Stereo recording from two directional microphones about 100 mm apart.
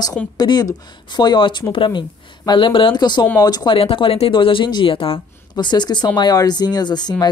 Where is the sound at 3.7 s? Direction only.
65° left (ahead or behind).